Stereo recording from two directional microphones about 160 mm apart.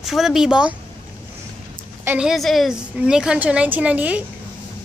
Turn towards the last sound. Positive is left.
turn(degrees=-10)  # may be behind; listen again after turning